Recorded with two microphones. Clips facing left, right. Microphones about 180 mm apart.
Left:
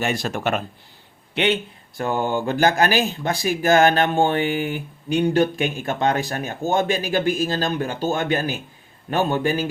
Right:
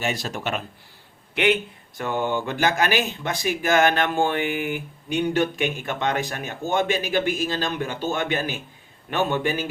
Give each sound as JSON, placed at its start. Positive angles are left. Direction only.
{"t": 0.0, "sound": "speech", "side_deg": 55}
{"t": 2.0, "sound": "speech", "side_deg": 40}